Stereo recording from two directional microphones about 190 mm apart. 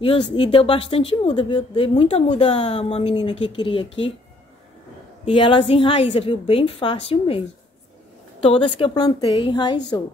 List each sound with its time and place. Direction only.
0.0 s speech: 25° left (ahead or behind)
5.2 s speech: 25° left (ahead or behind)